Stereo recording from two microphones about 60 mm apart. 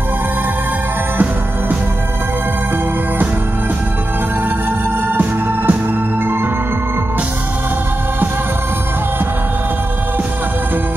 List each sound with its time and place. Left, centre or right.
1.1 s music: right
5.1 s music: right